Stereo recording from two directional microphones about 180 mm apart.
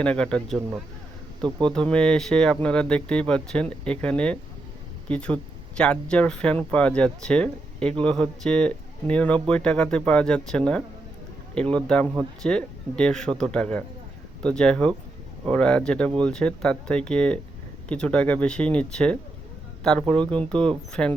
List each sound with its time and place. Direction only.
0.0 s speech: 5° left (ahead or behind)
1.5 s speech: 25° right (ahead or behind)
1.7 s speech: 5° left (ahead or behind)